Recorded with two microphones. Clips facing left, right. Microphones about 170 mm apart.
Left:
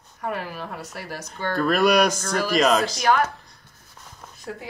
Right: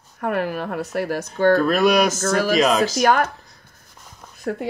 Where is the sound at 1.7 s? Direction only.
Centre (ahead or behind).